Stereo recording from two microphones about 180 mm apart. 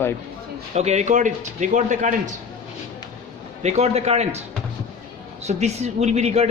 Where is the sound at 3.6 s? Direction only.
35° right (ahead or behind).